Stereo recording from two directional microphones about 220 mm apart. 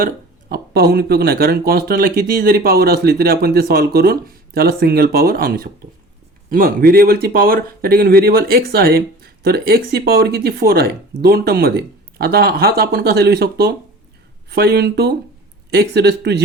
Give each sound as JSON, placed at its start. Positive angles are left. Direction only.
{"t": 0.0, "sound": "speech", "side_deg": -45}